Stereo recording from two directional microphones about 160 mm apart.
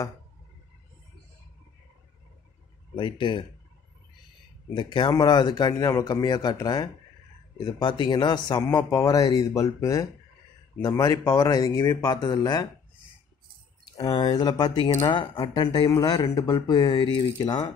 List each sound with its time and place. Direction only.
3.0 s speech: 30° left (ahead or behind)
4.7 s a man's voice: 30° left (ahead or behind)
13.9 s a man's voice: 25° left (ahead or behind)